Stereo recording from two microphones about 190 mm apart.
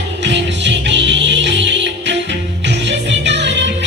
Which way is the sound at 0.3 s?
65° right (ahead or behind).